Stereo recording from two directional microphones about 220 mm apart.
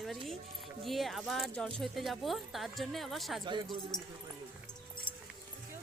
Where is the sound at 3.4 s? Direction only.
20° right (ahead or behind).